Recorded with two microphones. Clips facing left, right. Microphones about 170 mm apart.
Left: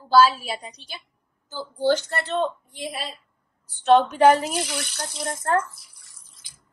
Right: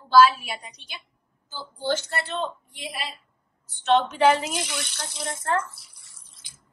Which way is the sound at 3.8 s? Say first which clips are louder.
Left 4 dB; 40° left (ahead or behind).